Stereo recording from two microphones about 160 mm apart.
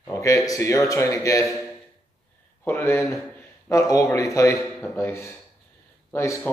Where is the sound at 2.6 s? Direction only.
15° left (ahead or behind).